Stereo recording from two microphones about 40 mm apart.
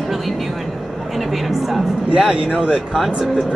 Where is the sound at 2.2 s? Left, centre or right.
Centre.